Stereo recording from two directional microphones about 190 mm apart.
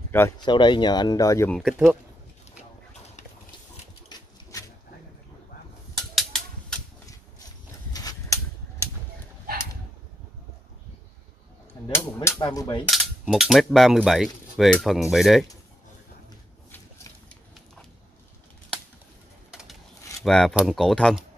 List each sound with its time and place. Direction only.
0.1 s speech: 15° left (ahead or behind)
0.5 s speech: 25° left (ahead or behind)
1.5 s cutlery: centre (ahead or behind)
5.9 s typewriter: centre (ahead or behind)
7.9 s a sound: 20° left (ahead or behind)
12.3 s speech: 20° left (ahead or behind)
12.8 s cutlery: centre (ahead or behind)
20.2 s cutlery: centre (ahead or behind)